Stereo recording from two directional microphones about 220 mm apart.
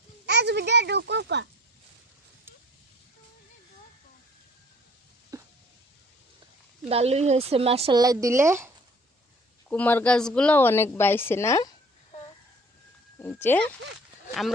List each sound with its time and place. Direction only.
0.3 s speech: 50° right (ahead or behind)
5.3 s a sound: 15° right (ahead or behind)
6.8 s speech: 30° right (ahead or behind); by 8.7 s 10° right (ahead or behind)
9.6 s a woman's voice: 5° left (ahead or behind)
13.1 s speech: 10° left (ahead or behind)